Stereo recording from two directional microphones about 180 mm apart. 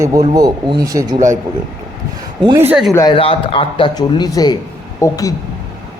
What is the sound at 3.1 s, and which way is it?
A man's voice, 30° left (ahead or behind).